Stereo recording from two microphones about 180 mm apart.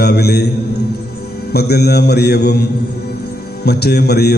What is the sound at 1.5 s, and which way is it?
Mantra, 65° left (ahead or behind).